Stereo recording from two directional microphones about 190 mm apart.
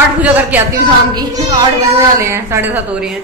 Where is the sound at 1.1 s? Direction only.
20° right (ahead or behind).